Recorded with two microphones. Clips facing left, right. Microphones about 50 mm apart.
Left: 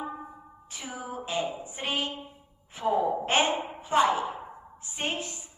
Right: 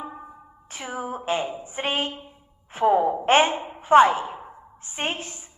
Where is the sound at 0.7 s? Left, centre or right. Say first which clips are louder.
Right 6 dB; right.